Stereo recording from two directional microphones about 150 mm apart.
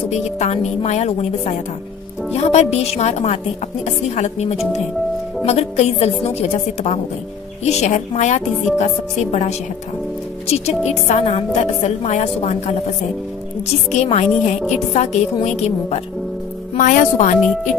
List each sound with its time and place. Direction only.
0.4 s a woman's voice: 50° left (ahead or behind)
10.9 s a woman's voice: 45° left (ahead or behind)
13.9 s a woman's voice: 45° left (ahead or behind)
16.7 s speech: 60° left (ahead or behind)